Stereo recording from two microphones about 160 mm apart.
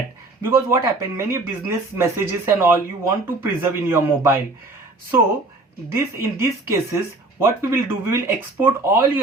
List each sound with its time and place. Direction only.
0.4 s speech: 15° right (ahead or behind)
5.9 s speech: 15° right (ahead or behind)